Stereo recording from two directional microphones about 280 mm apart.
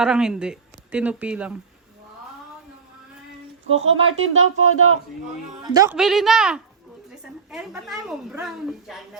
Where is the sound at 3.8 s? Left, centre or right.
Right.